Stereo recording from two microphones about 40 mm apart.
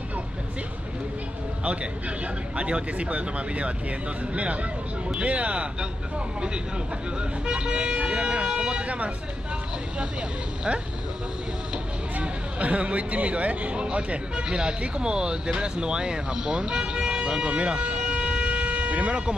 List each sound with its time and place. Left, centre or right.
1.6 s speech: right
11.7 s speech: right